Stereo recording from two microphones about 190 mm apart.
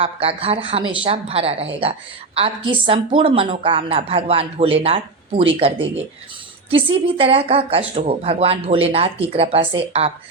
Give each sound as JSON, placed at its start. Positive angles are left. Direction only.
{"t": 0.0, "sound": "a woman's voice", "side_deg": -30}